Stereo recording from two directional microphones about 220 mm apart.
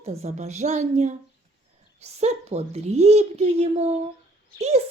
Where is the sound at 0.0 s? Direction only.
30° right (ahead or behind).